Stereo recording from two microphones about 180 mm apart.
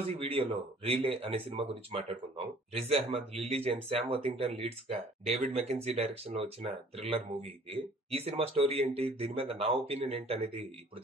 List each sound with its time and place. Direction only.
0.2 s speech: 30° right (ahead or behind)